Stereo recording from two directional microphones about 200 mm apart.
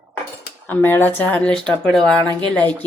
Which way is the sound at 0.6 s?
10° left (ahead or behind).